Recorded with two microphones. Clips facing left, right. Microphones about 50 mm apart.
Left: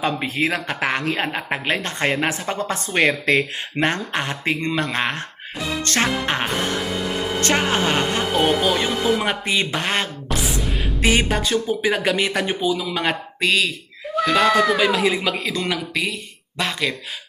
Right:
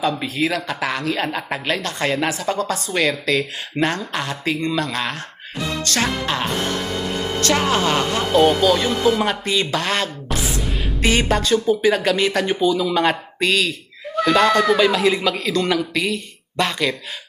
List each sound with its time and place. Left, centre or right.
0.0 s speech: left
5.8 s music: left
7.4 s speech: left
10.2 s music: centre
11.0 s speech: centre